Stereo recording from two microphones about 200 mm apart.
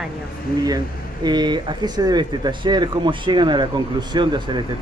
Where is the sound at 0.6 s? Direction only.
20° right (ahead or behind).